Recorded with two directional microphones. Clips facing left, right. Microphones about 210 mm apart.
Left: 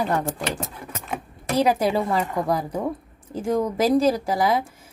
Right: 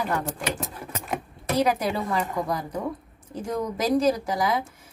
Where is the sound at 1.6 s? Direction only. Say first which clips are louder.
Left 4 dB; 30° left (ahead or behind).